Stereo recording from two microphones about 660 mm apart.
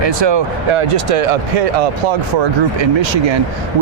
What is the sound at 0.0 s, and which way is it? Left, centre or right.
Speech, right.